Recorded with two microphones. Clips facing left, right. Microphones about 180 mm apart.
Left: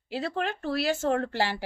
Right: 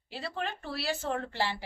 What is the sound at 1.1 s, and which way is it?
Speech, 60° left (ahead or behind).